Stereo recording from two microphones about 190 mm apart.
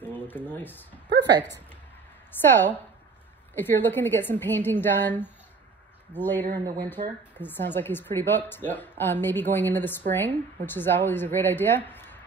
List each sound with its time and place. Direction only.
0.0 s speech: 10° left (ahead or behind)
1.1 s speech: 65° right (ahead or behind)
2.4 s a woman's voice: 10° left (ahead or behind)
6.5 s speech: 20° right (ahead or behind)
7.3 s a woman's voice: 10° left (ahead or behind)